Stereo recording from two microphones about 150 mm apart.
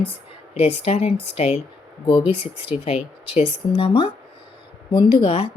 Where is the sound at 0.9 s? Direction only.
40° left (ahead or behind).